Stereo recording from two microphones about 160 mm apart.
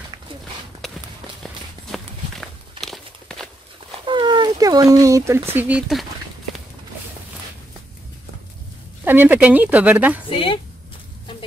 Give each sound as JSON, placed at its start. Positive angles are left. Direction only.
{"t": 0.8, "sound": "run", "side_deg": 0}
{"t": 1.4, "sound": "walk", "side_deg": 0}
{"t": 2.8, "sound": "a sound", "side_deg": 0}
{"t": 4.0, "sound": "speech", "side_deg": -30}
{"t": 9.0, "sound": "speech", "side_deg": -10}
{"t": 10.3, "sound": "speech", "side_deg": 35}